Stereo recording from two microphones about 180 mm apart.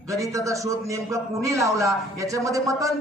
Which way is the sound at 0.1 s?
20° right (ahead or behind).